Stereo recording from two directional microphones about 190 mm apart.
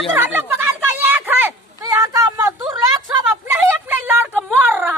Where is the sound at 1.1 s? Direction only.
10° right (ahead or behind).